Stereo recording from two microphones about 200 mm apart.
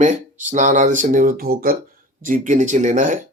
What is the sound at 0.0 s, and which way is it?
Speech, 40° right (ahead or behind).